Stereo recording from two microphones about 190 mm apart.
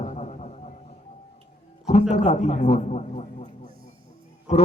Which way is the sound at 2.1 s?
35° left (ahead or behind).